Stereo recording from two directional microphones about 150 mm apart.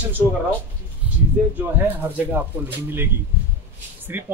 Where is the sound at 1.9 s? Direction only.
10° right (ahead or behind).